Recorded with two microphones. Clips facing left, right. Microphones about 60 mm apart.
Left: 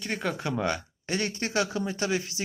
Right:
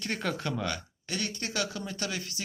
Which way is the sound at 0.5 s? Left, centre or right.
Left.